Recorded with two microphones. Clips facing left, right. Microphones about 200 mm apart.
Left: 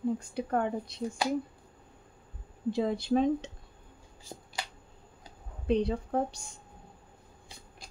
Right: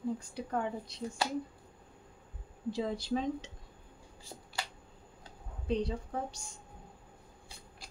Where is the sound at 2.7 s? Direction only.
60° left (ahead or behind).